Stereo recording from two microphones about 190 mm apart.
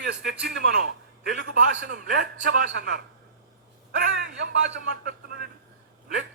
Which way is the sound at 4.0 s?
55° right (ahead or behind).